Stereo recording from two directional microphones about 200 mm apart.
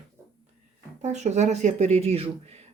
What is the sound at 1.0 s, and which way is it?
Speech, 35° right (ahead or behind).